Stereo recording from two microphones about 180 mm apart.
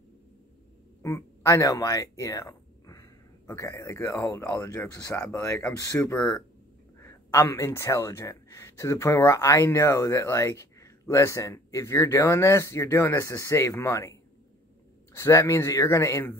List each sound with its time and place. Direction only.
1.0 s speech: 15° left (ahead or behind)
6.1 s speech: 5° left (ahead or behind)
15.1 s speech: 15° left (ahead or behind)